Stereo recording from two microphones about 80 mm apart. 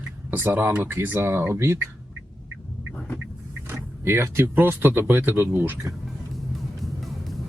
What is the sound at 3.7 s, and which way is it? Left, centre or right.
Speech, right.